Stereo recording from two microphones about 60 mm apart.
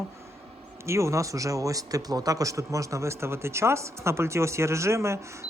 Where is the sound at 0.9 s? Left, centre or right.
Right.